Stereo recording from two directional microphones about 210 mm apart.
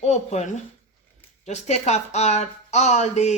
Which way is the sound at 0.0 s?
30° left (ahead or behind).